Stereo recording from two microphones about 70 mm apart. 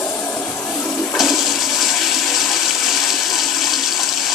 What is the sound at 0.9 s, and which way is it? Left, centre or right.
Toilet flush, left.